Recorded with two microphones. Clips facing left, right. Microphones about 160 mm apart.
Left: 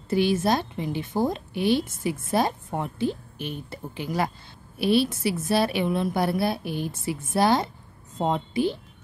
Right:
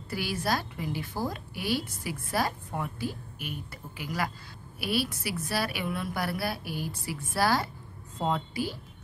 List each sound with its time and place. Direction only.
0.1 s a woman's voice: 25° left (ahead or behind)